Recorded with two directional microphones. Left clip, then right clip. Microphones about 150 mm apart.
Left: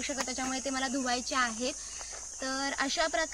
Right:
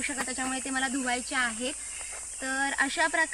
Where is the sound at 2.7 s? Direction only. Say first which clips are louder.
Right 3 dB; 30° left (ahead or behind).